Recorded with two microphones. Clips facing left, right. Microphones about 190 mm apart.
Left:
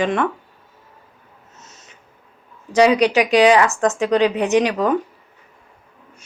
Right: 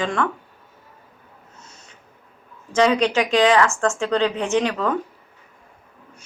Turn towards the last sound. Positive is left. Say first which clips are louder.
# left 4 dB
turn(degrees=15)  # may be behind; listen again after turning